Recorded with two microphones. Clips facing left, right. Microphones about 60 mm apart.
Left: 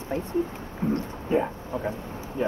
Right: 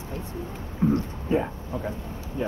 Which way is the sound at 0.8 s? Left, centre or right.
Centre.